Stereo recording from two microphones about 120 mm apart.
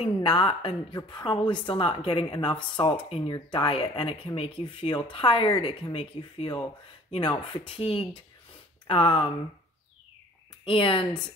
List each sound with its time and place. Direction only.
0.0 s a woman's voice: 40° left (ahead or behind)
8.8 s a woman's voice: 45° left (ahead or behind)
10.6 s a woman's voice: 45° left (ahead or behind)